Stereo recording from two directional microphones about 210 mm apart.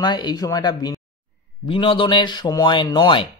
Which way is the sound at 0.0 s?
20° left (ahead or behind).